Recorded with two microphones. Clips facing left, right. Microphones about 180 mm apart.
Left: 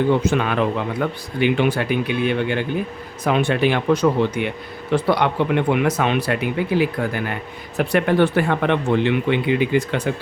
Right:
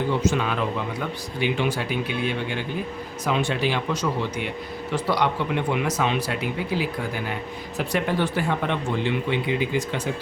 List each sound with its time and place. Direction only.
0.3 s speech: 60° left (ahead or behind)